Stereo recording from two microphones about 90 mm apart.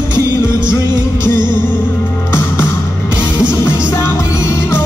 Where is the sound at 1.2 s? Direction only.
30° left (ahead or behind).